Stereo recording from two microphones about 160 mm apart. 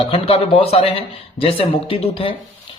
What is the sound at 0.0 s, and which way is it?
A man's voice, 35° left (ahead or behind).